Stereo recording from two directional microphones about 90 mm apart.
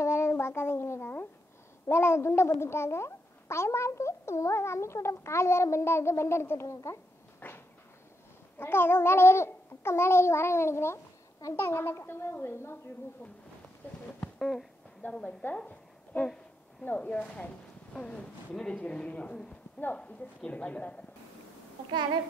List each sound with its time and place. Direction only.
0.0 s a child's voice: 30° left (ahead or behind)
7.3 s a sound: 25° left (ahead or behind)
8.5 s babbling: 25° left (ahead or behind)
13.8 s babbling: 20° left (ahead or behind)
14.4 s speech: centre (ahead or behind)
15.0 s a woman's voice: 15° left (ahead or behind)
15.5 s a sound: 15° left (ahead or behind)
16.8 s speech: 15° left (ahead or behind)